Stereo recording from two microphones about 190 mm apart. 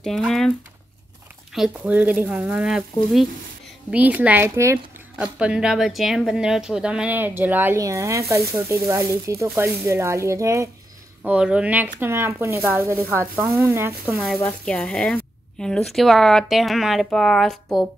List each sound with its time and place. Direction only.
0.0 s speech: centre (ahead or behind)
1.5 s speech: 5° right (ahead or behind)
11.2 s speech: 5° right (ahead or behind)
14.1 s speech: centre (ahead or behind)